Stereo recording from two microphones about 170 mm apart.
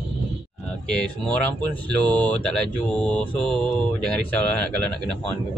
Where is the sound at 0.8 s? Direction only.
5° left (ahead or behind).